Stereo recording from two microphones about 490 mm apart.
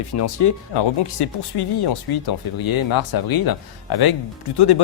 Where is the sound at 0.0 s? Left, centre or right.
Left.